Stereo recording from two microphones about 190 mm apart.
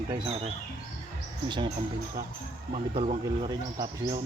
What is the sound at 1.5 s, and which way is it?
Speech, 25° right (ahead or behind).